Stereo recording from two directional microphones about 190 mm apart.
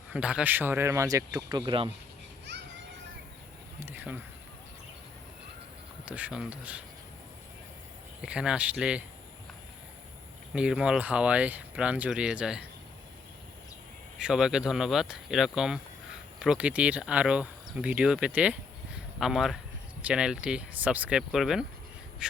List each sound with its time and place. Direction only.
0.1 s speech: 5° right (ahead or behind); by 1.9 s 25° right (ahead or behind)
2.5 s children playing: 65° right (ahead or behind)
3.8 s a sound: 10° right (ahead or behind)
6.1 s speech: 10° right (ahead or behind)
8.2 s speech: 5° right (ahead or behind)
10.5 s speech: 5° right (ahead or behind)
14.2 s speech: 5° right (ahead or behind)
22.2 s crow: 5° right (ahead or behind)